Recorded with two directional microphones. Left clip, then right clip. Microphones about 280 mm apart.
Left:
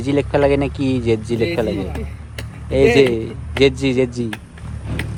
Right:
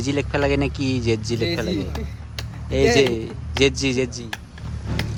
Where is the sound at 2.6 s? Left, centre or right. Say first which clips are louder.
Left 4 dB; centre.